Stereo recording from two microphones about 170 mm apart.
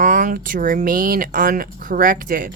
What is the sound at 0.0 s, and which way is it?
Speech, 50° right (ahead or behind).